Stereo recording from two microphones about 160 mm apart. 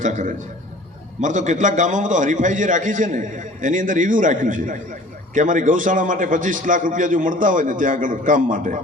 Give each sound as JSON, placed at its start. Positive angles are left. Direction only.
{"t": 0.0, "sound": "a man's voice", "side_deg": -50}